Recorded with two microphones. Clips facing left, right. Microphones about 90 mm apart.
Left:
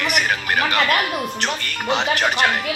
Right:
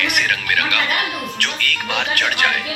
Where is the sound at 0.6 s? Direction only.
50° left (ahead or behind).